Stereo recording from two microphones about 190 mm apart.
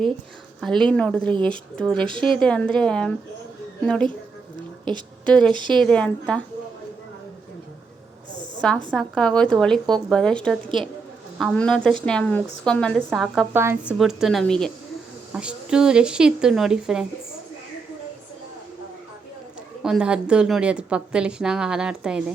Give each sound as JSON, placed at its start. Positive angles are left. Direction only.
{"t": 0.6, "sound": "a woman's voice", "side_deg": 5}
{"t": 2.0, "sound": "speech", "side_deg": -25}
{"t": 2.4, "sound": "a woman's voice", "side_deg": 5}
{"t": 5.2, "sound": "a woman's voice", "side_deg": 5}
{"t": 8.9, "sound": "a woman's voice", "side_deg": 5}
{"t": 13.5, "sound": "a woman's voice", "side_deg": -10}
{"t": 19.8, "sound": "a woman's voice", "side_deg": -5}